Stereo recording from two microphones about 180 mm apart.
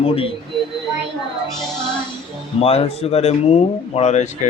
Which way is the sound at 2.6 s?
35° left (ahead or behind).